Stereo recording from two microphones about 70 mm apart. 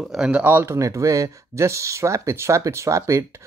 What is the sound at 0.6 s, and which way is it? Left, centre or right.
Speech, right.